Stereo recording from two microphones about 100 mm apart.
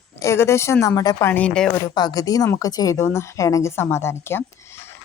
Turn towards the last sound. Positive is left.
turn(degrees=25)  # may be behind; listen again after turning